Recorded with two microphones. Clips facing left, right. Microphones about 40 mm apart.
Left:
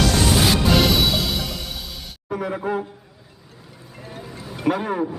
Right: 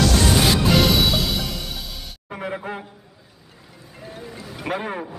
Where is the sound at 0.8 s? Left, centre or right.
Centre.